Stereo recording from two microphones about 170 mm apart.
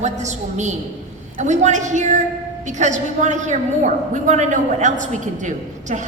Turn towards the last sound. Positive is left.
turn(degrees=-45)  # may be behind; listen again after turning